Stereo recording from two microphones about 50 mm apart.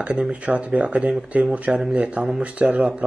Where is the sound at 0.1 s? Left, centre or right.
Centre.